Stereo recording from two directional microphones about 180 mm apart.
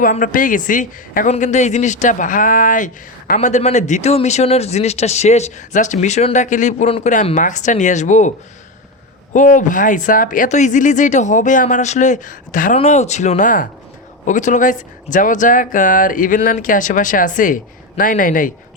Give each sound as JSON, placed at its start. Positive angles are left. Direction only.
{"t": 0.0, "sound": "a man's voice", "side_deg": 50}
{"t": 9.3, "sound": "speech", "side_deg": 45}